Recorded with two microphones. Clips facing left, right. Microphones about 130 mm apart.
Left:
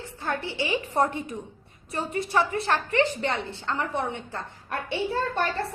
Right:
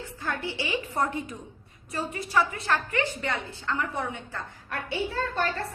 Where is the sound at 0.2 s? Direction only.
25° left (ahead or behind).